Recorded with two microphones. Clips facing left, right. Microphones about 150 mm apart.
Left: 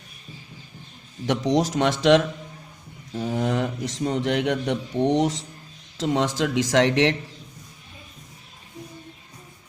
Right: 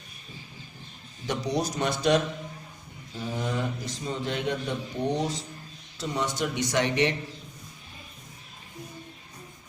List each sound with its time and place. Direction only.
1.3 s speech: 90° left
3.3 s speech: 65° left (ahead or behind); by 7.2 s 90° left